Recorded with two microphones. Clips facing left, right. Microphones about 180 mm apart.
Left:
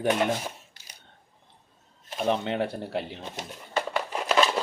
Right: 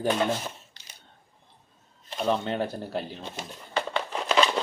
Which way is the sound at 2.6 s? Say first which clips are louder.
Left 1 dB; 25° left (ahead or behind).